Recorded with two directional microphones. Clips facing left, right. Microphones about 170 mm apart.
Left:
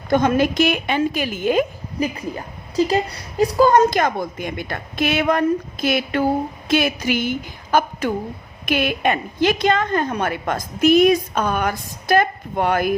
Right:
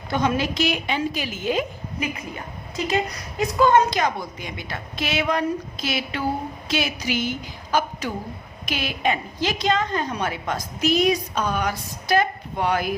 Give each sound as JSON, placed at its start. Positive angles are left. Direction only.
{"t": 0.1, "sound": "a woman's voice", "side_deg": 50}
{"t": 2.0, "sound": "a woman's voice", "side_deg": 35}